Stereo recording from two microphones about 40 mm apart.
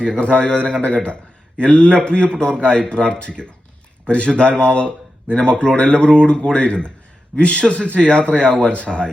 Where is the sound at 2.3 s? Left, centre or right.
Centre.